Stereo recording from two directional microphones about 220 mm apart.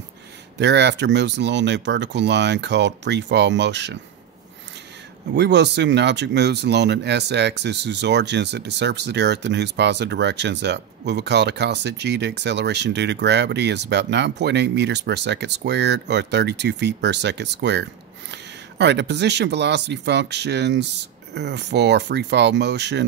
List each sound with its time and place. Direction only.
0.6 s speech: 50° right (ahead or behind)
5.3 s speech: 50° right (ahead or behind)